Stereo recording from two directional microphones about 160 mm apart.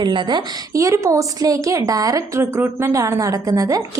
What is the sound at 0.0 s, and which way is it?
A woman's voice, 30° right (ahead or behind).